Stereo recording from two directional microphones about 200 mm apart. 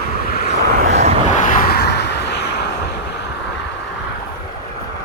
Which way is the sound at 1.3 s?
40° left (ahead or behind).